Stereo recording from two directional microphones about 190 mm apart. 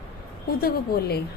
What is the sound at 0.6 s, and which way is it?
Speech, 55° left (ahead or behind).